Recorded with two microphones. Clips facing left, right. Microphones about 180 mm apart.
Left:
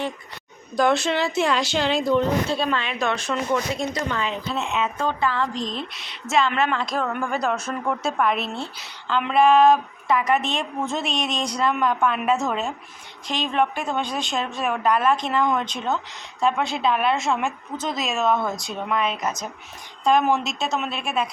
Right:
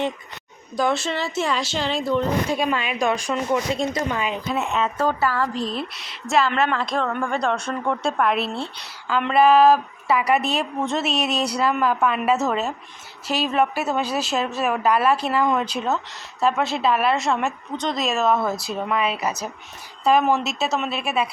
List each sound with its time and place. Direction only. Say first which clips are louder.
0.8 s a woman's voice: left 2 dB; centre (ahead or behind)
2.5 s a woman's voice: right 1 dB; 10° right (ahead or behind)
8.4 s speech: right 3 dB; 30° right (ahead or behind)
8.6 s a woman's voice: right 1 dB; 5° right (ahead or behind)